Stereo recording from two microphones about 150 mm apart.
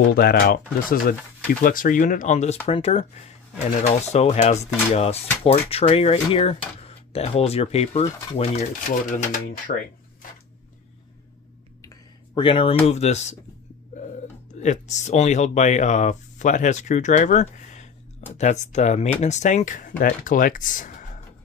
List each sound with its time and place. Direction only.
0.1 s speech: 90° left; by 2.5 s 55° left (ahead or behind)
2.6 s speech: 45° left (ahead or behind)
9.1 s speech: 65° left (ahead or behind)
12.4 s speech: 35° left (ahead or behind)
12.8 s speech: 45° left (ahead or behind)
14.6 s speech: 50° left (ahead or behind)